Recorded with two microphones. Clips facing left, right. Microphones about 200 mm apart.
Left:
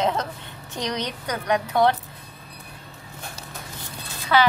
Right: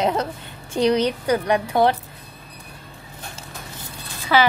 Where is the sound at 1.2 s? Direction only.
30° right (ahead or behind).